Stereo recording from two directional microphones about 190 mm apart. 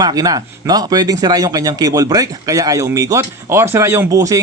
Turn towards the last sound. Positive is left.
turn(degrees=-15)  # may be behind; listen again after turning